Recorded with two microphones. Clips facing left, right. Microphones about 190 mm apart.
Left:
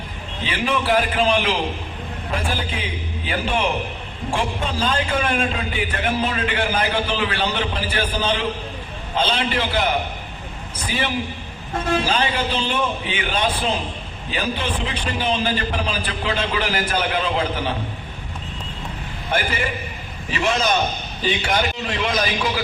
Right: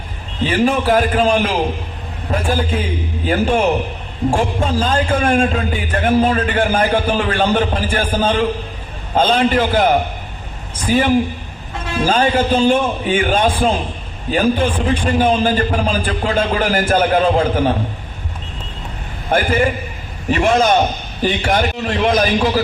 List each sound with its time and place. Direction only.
0.4 s a man's voice: 45° right (ahead or behind)
20.3 s a man's voice: 50° right (ahead or behind)